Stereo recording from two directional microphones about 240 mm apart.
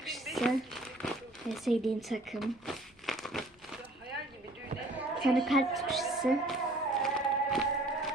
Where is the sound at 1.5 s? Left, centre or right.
Centre.